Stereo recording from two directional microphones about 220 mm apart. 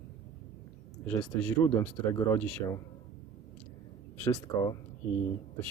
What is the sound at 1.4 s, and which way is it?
Speech, 10° left (ahead or behind).